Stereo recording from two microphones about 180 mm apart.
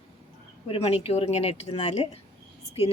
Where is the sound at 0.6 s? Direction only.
35° left (ahead or behind).